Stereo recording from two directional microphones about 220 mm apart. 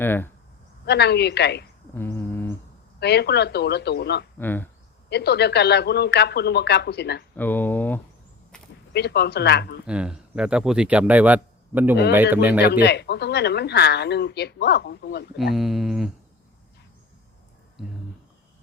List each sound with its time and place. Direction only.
0.0 s speech: 10° left (ahead or behind)
0.9 s speech: 50° left (ahead or behind)
2.0 s a sound: 10° left (ahead or behind)
3.0 s speech: 50° left (ahead or behind)
4.4 s speech: 10° left (ahead or behind)
5.0 s speech: 50° left (ahead or behind)
7.3 s speech: 10° left (ahead or behind)
8.9 s speech: 50° left (ahead or behind)
9.8 s speech: 5° right (ahead or behind)
12.8 s speech: 50° left (ahead or behind)
15.4 s speech: centre (ahead or behind)